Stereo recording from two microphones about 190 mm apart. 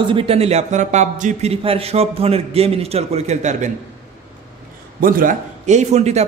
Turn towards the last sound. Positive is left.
turn(degrees=-35)  # may be behind; listen again after turning